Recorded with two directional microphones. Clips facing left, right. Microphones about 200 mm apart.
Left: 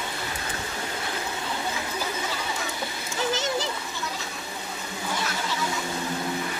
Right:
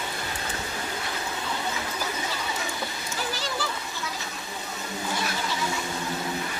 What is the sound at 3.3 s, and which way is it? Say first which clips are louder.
Splash: left 5 dB; 20° left (ahead or behind).